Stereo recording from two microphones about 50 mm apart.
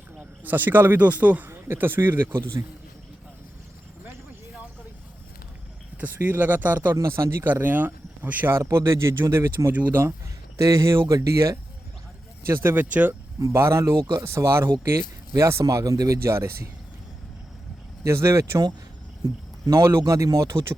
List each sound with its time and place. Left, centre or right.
0.2 s speech: right
1.5 s speech: right
6.1 s speech: right
6.9 s speech: right
7.4 s speech: right
8.5 s speech: right
9.9 s speech: right
10.7 s speech: right
12.5 s speech: right
13.4 s speech: right
14.0 s speech: right
15.4 s speech: right
18.0 s speech: right
20.1 s speech: right